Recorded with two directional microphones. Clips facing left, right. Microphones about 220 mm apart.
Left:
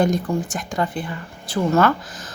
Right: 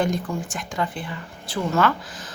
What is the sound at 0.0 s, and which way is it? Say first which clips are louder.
A woman's voice: left 5 dB; 40° left (ahead or behind).